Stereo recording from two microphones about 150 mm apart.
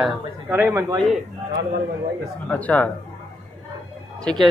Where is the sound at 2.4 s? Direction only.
10° left (ahead or behind).